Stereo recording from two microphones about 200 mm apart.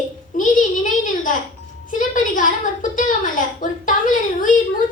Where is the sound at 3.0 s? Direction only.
40° left (ahead or behind).